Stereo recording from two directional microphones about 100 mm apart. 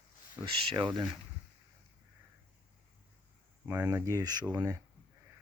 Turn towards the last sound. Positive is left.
turn(degrees=-20)  # may be behind; listen again after turning